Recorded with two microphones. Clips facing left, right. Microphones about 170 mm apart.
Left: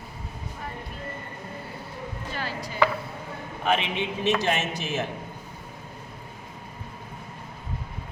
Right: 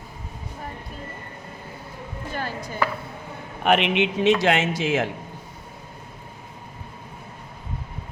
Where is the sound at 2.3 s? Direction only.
50° right (ahead or behind).